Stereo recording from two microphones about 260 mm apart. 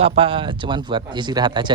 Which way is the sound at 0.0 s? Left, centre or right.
Right.